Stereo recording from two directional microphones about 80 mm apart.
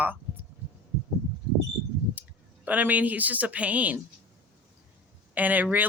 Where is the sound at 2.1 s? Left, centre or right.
Centre.